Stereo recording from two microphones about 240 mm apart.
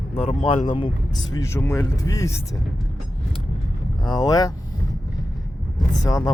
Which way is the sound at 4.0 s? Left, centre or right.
Centre.